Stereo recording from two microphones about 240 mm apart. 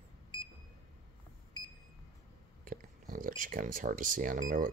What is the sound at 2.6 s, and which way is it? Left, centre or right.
Speech, right.